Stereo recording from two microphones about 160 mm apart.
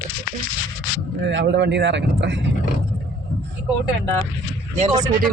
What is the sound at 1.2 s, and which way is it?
Speech, 90° right.